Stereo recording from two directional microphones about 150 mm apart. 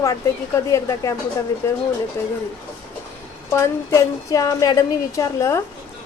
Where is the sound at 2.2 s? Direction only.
15° left (ahead or behind).